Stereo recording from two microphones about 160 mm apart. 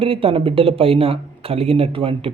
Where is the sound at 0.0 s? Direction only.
35° right (ahead or behind).